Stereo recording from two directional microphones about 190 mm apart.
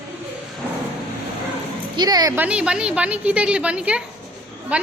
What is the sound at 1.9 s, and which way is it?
Speech, 20° right (ahead or behind).